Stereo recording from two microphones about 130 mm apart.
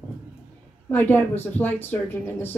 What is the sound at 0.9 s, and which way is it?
Speech, 15° left (ahead or behind).